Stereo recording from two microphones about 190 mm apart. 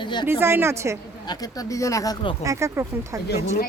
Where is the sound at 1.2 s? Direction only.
20° left (ahead or behind).